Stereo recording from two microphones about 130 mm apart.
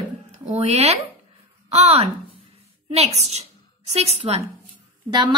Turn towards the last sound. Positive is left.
turn(degrees=-35)  # may be behind; listen again after turning